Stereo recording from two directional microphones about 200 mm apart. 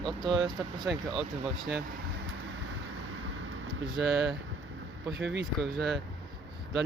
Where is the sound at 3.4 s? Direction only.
85° right.